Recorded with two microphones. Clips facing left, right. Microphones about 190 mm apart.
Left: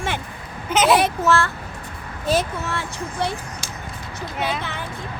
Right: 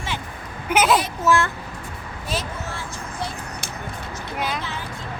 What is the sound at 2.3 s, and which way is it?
Speech, 70° left (ahead or behind).